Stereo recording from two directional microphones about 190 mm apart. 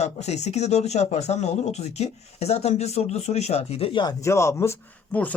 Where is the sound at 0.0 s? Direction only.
35° left (ahead or behind).